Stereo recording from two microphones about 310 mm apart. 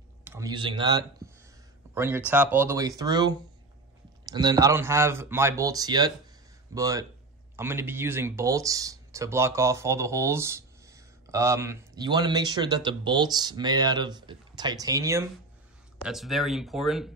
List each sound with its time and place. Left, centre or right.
0.2 s speech: centre